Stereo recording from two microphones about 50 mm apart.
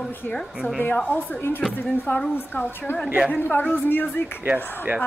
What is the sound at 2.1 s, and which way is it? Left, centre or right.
Speech, left.